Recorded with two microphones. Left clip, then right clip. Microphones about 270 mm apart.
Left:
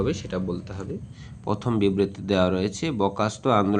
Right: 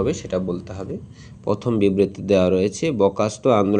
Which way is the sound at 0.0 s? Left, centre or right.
Centre.